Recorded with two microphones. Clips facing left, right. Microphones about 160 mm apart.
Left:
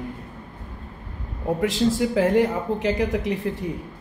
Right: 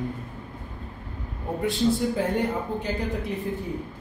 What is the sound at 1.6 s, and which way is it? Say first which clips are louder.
Speech: left 1 dB; 90° left.